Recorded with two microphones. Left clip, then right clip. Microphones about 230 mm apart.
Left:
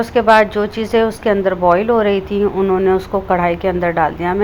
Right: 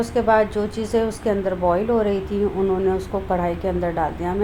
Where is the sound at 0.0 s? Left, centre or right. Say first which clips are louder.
Left 7 dB; centre.